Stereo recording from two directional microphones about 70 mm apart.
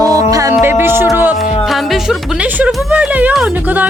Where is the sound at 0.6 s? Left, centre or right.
Right.